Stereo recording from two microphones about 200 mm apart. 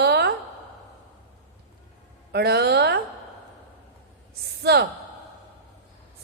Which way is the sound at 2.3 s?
55° right (ahead or behind).